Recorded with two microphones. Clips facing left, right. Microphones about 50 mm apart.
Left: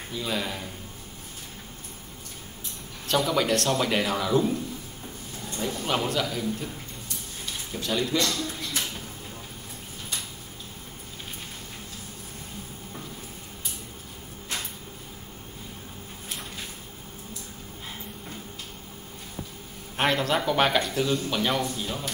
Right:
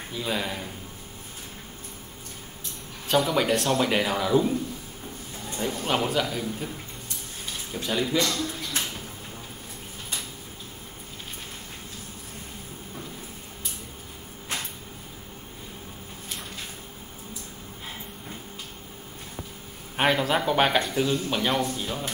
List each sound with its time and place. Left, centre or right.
0.1 s speech: centre
3.1 s speech: centre
7.8 s speech: centre
20.0 s speech: centre